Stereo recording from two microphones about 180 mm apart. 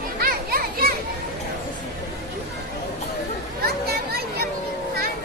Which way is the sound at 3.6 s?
60° right (ahead or behind).